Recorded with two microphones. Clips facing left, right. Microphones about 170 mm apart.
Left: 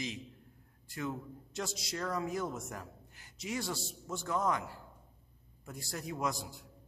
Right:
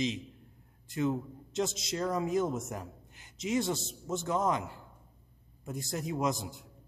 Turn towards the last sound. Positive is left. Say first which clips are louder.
# right 5 dB
turn(degrees=-20)  # may be behind; listen again after turning